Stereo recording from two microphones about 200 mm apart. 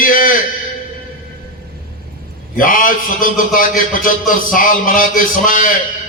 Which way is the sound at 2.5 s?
45° left (ahead or behind).